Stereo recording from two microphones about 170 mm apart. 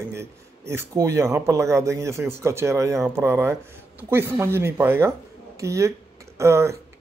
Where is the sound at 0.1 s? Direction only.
15° right (ahead or behind).